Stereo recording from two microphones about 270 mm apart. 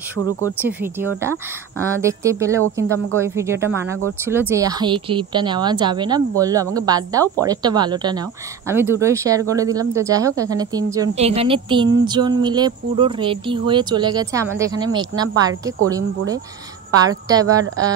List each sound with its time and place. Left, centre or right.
0.6 s speech: centre
2.6 s speech: right
3.2 s speech: centre
17.0 s speech: centre